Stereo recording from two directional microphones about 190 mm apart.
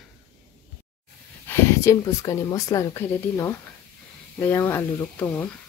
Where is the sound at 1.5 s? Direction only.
15° left (ahead or behind).